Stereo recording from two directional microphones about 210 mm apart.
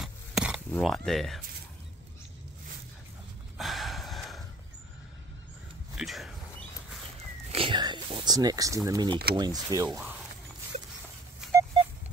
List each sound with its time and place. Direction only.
0.0 s dishes: 5° right (ahead or behind)
0.7 s speech: 5° left (ahead or behind)
3.5 s gasp: centre (ahead or behind)
5.9 s a sound: centre (ahead or behind)
7.5 s whispering: 25° right (ahead or behind)
9.3 s speech: 20° right (ahead or behind)
9.8 s speech: 5° right (ahead or behind)